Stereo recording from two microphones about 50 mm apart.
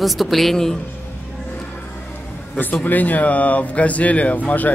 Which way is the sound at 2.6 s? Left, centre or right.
Left.